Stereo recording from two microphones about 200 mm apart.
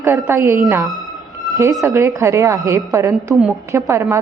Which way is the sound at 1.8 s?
15° right (ahead or behind).